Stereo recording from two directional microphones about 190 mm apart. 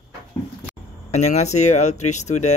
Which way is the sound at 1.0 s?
35° left (ahead or behind).